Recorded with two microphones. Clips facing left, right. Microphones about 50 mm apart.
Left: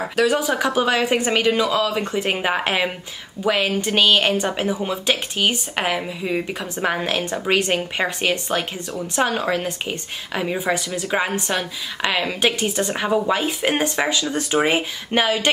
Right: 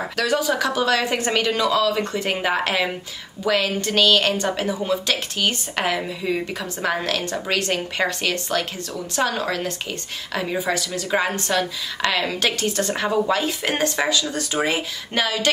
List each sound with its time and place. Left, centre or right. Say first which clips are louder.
0.1 s a woman's voice: left 3 dB; centre